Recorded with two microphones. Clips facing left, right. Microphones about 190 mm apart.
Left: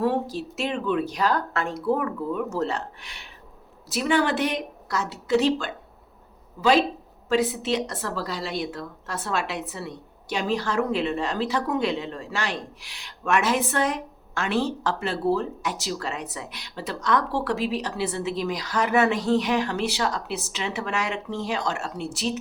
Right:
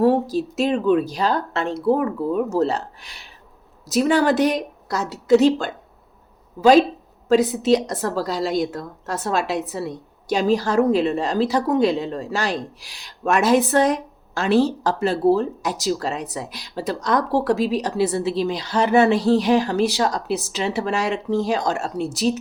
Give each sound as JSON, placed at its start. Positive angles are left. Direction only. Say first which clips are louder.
{"t": 0.0, "sound": "speech", "louder": "right 7 dB", "side_deg": -40}
{"t": 7.3, "sound": "speech", "louder": "right 7 dB", "side_deg": -40}